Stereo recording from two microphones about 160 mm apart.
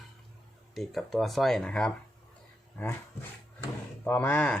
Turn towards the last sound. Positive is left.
turn(degrees=10)  # may be behind; listen again after turning